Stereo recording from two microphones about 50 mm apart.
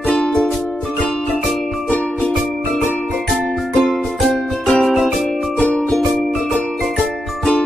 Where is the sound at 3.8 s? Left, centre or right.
Centre.